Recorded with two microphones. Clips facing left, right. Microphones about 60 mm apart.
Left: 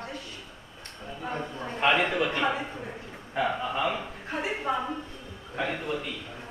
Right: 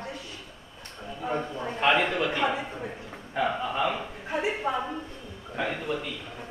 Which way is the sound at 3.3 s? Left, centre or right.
Centre.